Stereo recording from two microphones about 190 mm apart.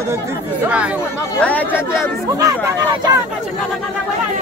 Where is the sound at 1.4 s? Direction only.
10° left (ahead or behind).